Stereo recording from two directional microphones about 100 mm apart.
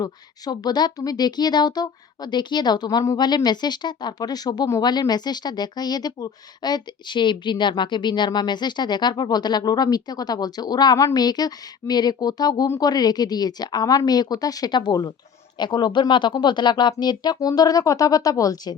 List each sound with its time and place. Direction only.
0.0 s a woman's voice: 40° left (ahead or behind)